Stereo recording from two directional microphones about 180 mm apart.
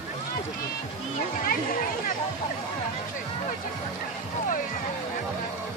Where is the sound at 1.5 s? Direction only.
50° left (ahead or behind).